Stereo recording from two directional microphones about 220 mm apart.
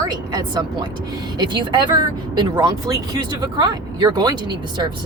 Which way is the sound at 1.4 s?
20° right (ahead or behind).